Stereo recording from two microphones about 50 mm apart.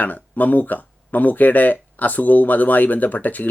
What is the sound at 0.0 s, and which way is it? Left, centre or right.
Speech, left.